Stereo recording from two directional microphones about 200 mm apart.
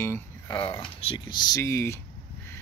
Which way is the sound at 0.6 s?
25° left (ahead or behind).